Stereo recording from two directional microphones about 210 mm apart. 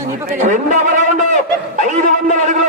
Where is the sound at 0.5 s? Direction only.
35° right (ahead or behind).